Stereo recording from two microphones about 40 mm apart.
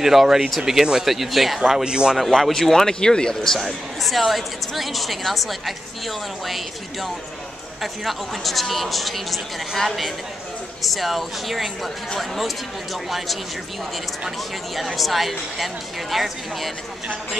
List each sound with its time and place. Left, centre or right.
0.0 s speech: centre
1.9 s speech: right
2.1 s a man's voice: centre
3.5 s speech: centre
15.0 s speech: centre